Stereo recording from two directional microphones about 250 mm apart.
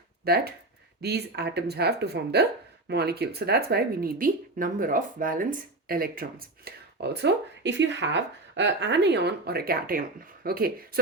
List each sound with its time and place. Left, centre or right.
0.3 s speech: right